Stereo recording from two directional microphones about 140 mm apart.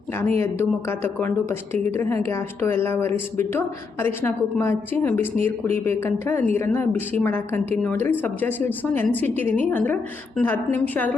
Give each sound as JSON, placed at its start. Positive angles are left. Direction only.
{"t": 0.3, "sound": "speech", "side_deg": 15}